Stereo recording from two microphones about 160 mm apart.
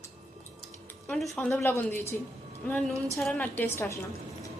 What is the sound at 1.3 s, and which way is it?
A woman's voice, 10° left (ahead or behind).